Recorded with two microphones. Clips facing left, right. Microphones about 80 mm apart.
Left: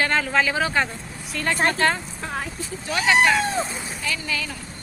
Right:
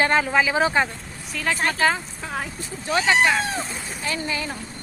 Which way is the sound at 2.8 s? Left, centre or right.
Right.